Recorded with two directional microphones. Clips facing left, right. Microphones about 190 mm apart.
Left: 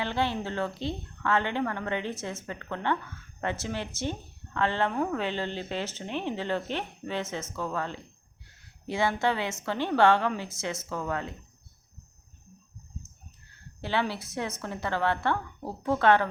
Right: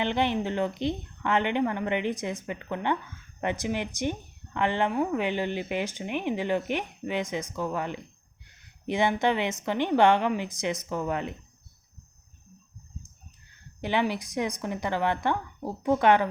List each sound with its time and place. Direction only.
0.0 s speech: 20° right (ahead or behind)
13.8 s speech: 15° right (ahead or behind)